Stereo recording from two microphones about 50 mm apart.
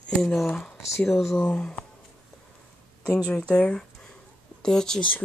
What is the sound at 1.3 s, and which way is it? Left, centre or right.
Speech, left.